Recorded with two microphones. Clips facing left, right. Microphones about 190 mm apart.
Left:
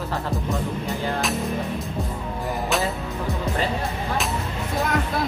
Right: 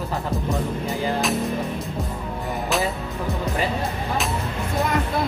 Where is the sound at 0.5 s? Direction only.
Centre (ahead or behind).